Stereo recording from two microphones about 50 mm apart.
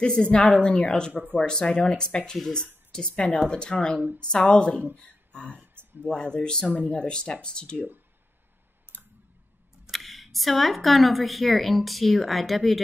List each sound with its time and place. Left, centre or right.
0.0 s a woman's voice: centre
8.9 s clicking: left
9.8 s speech: centre